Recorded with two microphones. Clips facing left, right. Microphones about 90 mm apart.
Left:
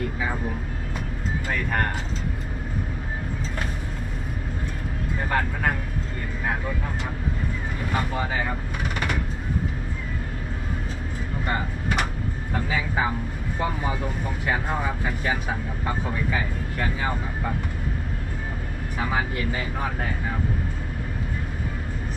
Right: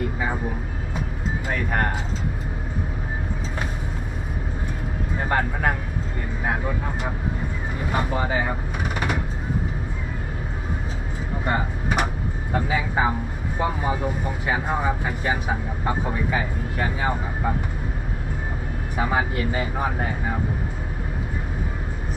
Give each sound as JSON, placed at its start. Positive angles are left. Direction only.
{"t": 0.2, "sound": "vehicle", "side_deg": -5}
{"t": 1.5, "sound": "music", "side_deg": -10}
{"t": 5.3, "sound": "speech", "side_deg": -10}
{"t": 7.9, "sound": "speech", "side_deg": -10}
{"t": 11.4, "sound": "a sound", "side_deg": -10}
{"t": 12.5, "sound": "speech", "side_deg": -10}
{"t": 18.9, "sound": "speech", "side_deg": -10}